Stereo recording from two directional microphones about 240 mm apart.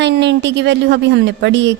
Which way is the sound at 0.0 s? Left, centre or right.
Right.